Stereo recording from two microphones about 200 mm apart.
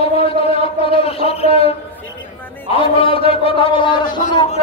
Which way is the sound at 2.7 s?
25° left (ahead or behind).